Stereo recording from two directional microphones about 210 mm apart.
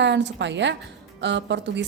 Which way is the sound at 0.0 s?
55° right (ahead or behind).